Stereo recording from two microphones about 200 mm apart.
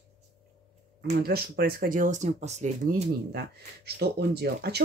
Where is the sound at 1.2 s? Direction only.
50° right (ahead or behind).